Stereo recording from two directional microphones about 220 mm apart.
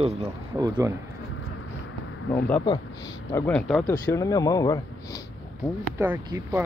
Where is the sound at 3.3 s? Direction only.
5° left (ahead or behind).